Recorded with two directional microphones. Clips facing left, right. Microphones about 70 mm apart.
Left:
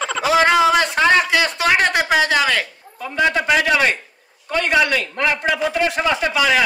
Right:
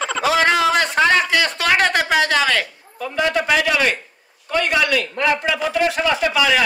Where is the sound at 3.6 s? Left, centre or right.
Left.